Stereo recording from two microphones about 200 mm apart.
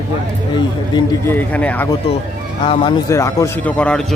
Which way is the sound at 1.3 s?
10° left (ahead or behind).